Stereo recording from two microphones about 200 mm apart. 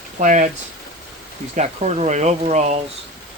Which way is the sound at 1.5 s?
35° right (ahead or behind).